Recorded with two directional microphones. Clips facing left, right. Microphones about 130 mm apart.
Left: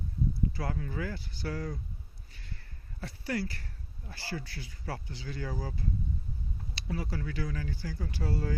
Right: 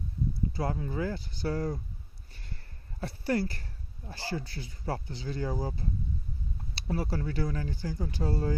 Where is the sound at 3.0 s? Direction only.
35° right (ahead or behind).